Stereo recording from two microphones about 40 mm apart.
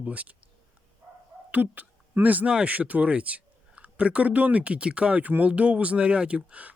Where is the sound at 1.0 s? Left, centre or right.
Right.